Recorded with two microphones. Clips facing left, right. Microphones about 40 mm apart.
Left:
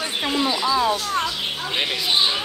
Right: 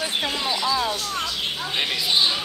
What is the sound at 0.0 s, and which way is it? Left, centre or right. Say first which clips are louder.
Speech: left 3 dB; centre.